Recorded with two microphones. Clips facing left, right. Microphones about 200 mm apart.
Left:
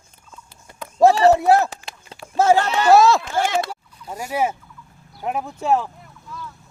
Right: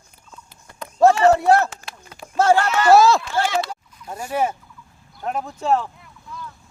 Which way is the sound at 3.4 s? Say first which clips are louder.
Left 1 dB; 50° left (ahead or behind).